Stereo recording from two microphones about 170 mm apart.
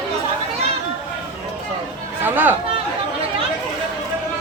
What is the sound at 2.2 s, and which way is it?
Speech, 10° right (ahead or behind).